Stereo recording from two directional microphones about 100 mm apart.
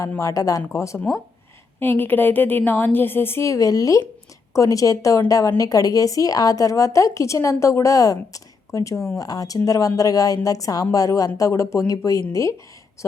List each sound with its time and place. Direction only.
0.2 s a woman's voice: 35° left (ahead or behind)